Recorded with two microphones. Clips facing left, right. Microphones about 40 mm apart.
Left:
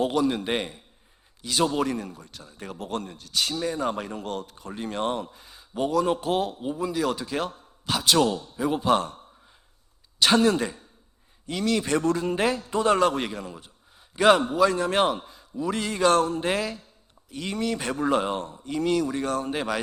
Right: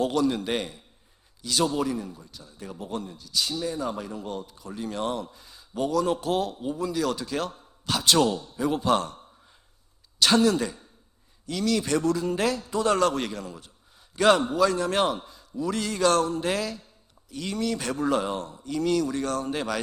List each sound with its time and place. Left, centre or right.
0.0 s a man's voice: centre
1.7 s speech: left
4.5 s a man's voice: left
7.9 s a man's voice: centre